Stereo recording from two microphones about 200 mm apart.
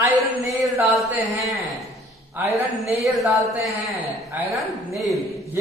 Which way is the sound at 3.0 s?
Centre (ahead or behind).